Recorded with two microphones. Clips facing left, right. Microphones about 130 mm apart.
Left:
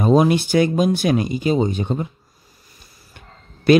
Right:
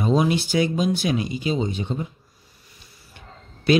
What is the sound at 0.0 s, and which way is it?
Speech, 50° left (ahead or behind).